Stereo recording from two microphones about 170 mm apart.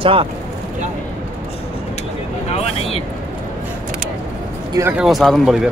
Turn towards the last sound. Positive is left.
turn(degrees=0)  # may be behind; listen again after turning